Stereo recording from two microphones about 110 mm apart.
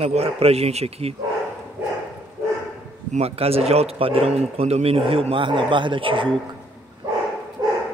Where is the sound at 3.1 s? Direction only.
65° right (ahead or behind); by 6.3 s 50° right (ahead or behind).